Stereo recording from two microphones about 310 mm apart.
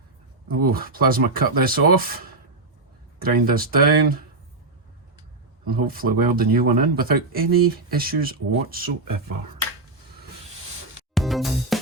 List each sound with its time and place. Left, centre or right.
0.4 s speech: right
5.6 s speech: right
9.0 s speech: right
11.1 s music: centre